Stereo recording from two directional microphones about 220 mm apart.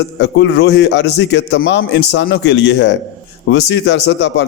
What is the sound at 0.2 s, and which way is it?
A man's voice, 50° left (ahead or behind).